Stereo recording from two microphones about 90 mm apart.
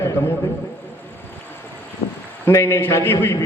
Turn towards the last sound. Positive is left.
turn(degrees=30)  # may be behind; listen again after turning